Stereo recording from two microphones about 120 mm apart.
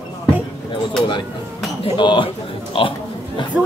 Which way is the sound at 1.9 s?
40° left (ahead or behind).